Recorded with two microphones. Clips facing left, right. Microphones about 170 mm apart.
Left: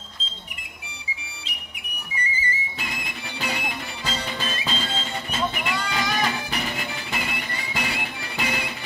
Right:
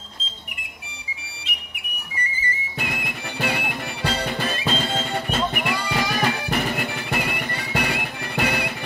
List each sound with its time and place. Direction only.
2.8 s music: 60° right (ahead or behind)